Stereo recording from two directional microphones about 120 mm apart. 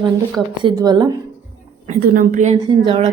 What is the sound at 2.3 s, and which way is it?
Speech, 75° right (ahead or behind).